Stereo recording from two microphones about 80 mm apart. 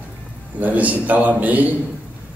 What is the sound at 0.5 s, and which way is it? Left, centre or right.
A man's voice, centre.